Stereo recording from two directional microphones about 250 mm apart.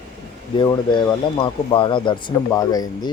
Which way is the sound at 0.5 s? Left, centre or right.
Centre.